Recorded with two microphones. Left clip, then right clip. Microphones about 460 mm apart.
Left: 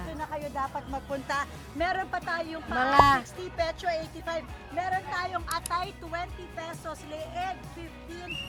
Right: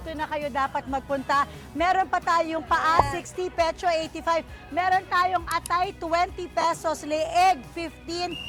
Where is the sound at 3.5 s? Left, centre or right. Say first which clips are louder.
Right 6 dB; right.